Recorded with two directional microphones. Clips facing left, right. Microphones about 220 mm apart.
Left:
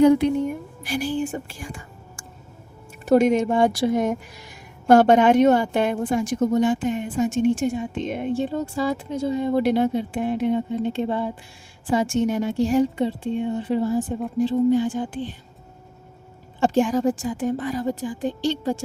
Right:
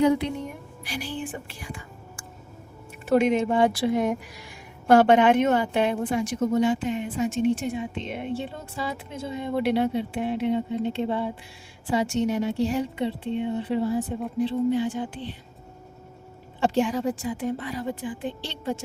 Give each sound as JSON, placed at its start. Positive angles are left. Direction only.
{"t": 0.9, "sound": "a woman's voice", "side_deg": 45}
{"t": 16.6, "sound": "a woman's voice", "side_deg": 50}